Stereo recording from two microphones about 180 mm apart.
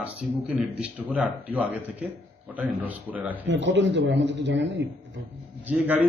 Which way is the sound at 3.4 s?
75° right (ahead or behind).